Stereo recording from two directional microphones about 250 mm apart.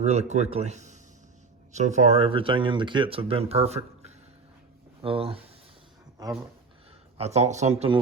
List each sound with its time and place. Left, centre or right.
0.0 s speech: right
7.2 s speech: right